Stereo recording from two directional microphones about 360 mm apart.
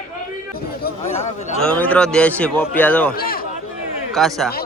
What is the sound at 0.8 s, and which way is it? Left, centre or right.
Speech, left.